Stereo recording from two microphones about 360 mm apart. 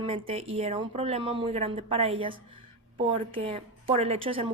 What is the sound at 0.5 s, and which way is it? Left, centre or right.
A woman's voice, centre.